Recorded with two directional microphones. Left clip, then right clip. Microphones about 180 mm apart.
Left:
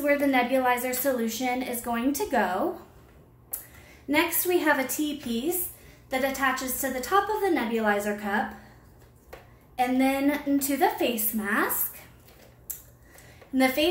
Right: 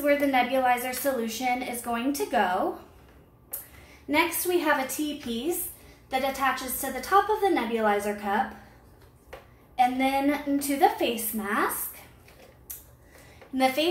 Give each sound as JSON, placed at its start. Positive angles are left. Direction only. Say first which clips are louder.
{"t": 0.0, "sound": "a woman's voice", "louder": "even", "side_deg": 25}
{"t": 4.1, "sound": "a woman's voice", "louder": "even", "side_deg": 25}
{"t": 9.8, "sound": "a woman's voice", "louder": "right 1 dB", "side_deg": 25}
{"t": 13.6, "sound": "a woman's voice", "louder": "even", "side_deg": 25}